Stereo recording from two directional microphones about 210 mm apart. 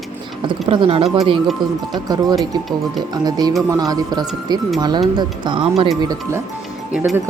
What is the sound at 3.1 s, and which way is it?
Speech, 20° right (ahead or behind).